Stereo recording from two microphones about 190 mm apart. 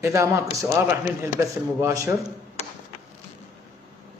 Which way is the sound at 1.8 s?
15° right (ahead or behind).